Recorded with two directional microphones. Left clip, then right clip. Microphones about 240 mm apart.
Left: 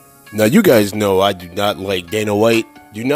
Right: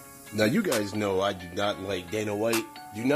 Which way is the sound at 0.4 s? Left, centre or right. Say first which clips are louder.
Left 14 dB; left.